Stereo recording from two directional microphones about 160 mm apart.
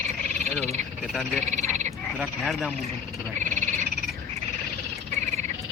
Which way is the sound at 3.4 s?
50° right (ahead or behind).